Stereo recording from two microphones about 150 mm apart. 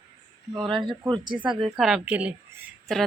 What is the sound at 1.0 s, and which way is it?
Speech, 30° right (ahead or behind).